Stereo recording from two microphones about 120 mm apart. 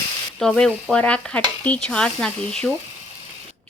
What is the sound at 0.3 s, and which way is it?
A woman's voice, 5° left (ahead or behind).